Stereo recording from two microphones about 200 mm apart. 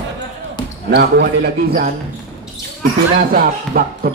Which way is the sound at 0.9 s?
55° right (ahead or behind).